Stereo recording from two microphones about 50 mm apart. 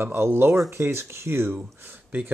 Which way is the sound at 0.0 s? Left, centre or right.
Right.